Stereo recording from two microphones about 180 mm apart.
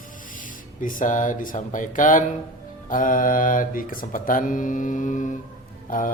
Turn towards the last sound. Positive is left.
turn(degrees=50)  # may be behind; listen again after turning